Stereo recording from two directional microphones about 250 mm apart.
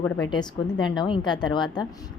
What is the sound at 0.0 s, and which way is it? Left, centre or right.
Speech, centre.